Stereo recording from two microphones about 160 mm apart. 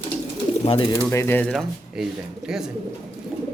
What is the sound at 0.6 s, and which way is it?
Speech, 35° left (ahead or behind).